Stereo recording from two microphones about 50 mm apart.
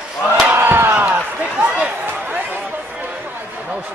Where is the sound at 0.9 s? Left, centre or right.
Right.